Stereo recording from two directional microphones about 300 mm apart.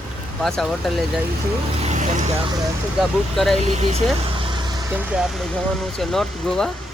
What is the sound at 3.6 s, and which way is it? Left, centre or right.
Speech, right.